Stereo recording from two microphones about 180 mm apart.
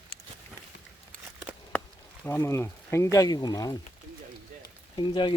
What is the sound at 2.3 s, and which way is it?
Speech, 15° left (ahead or behind).